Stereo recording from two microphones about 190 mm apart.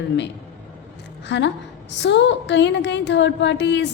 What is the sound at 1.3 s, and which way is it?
A woman's voice, 65° left (ahead or behind).